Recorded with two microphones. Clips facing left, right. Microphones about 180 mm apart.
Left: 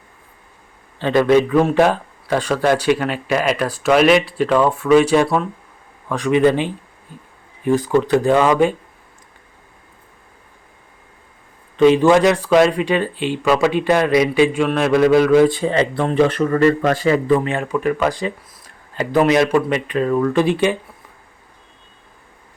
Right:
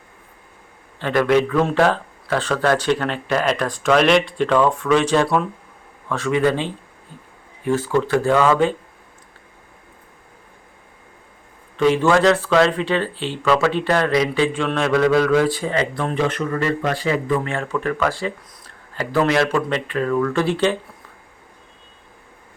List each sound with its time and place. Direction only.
0.9 s speech: 20° left (ahead or behind)
11.8 s speech: 20° left (ahead or behind); by 17.3 s 45° left (ahead or behind)
17.4 s speech: 15° left (ahead or behind)